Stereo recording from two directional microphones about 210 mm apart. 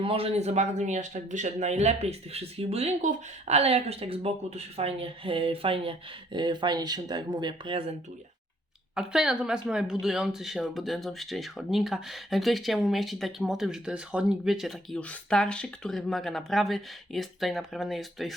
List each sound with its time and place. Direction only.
0.0 s a man's voice: 25° right (ahead or behind)
9.0 s speech: 5° right (ahead or behind)